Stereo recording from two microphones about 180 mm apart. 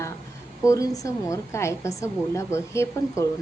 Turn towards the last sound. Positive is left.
turn(degrees=15)  # may be behind; listen again after turning